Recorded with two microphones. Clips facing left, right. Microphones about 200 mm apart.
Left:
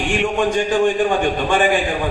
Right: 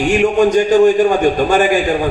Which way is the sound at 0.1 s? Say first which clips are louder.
Right 7 dB; 40° right (ahead or behind).